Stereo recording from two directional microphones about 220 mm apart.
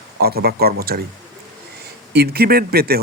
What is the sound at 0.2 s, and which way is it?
Speech, 45° right (ahead or behind).